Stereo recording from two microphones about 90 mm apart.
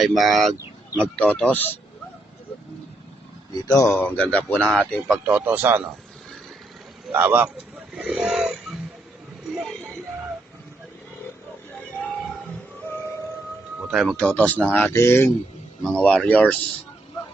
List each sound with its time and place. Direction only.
0.0 s speech: centre (ahead or behind)
1.0 s speech: 15° left (ahead or behind)
3.5 s speech: 45° left (ahead or behind)
3.8 s speech: 20° left (ahead or behind)
5.2 s a man's voice: 20° right (ahead or behind)
7.1 s a man's voice: 20° right (ahead or behind)
8.3 s a sound: 5° right (ahead or behind)
13.9 s speech: centre (ahead or behind)
14.2 s speech: 15° left (ahead or behind)
14.9 s a man's voice: 30° left (ahead or behind)
15.8 s speech: 10° left (ahead or behind)